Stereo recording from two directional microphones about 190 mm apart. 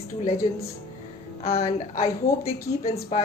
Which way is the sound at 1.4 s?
30° left (ahead or behind).